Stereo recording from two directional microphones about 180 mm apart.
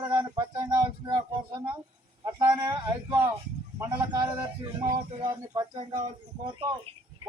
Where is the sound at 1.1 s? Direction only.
25° right (ahead or behind).